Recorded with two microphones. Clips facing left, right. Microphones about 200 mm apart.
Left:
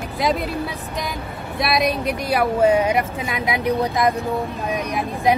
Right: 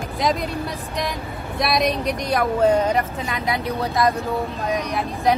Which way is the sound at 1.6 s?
Centre (ahead or behind).